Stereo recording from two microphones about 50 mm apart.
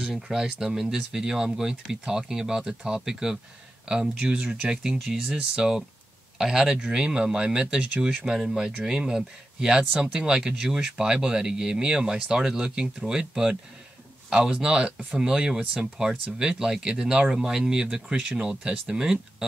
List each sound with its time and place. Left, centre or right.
0.0 s speech: centre; by 15.1 s right
15.1 s speech: centre